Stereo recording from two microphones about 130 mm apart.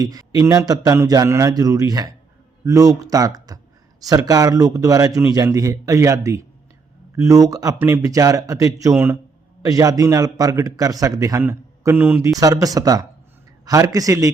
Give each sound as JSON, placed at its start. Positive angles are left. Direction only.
{"t": 0.0, "sound": "a man's voice", "side_deg": -30}
{"t": 12.3, "sound": "a man's voice", "side_deg": -25}